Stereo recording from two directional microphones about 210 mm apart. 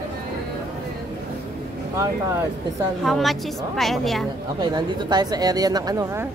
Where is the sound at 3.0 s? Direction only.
Centre (ahead or behind).